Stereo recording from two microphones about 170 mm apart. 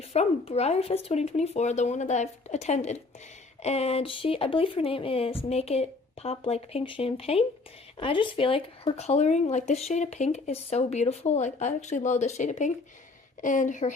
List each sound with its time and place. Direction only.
0.1 s speech: 40° left (ahead or behind)